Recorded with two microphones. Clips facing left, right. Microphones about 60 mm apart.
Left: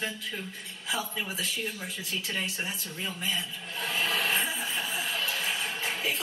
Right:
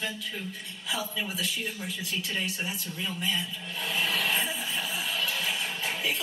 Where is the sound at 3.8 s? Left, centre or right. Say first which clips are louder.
Even; left.